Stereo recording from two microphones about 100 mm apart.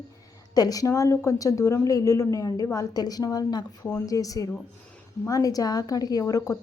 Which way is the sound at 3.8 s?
30° left (ahead or behind).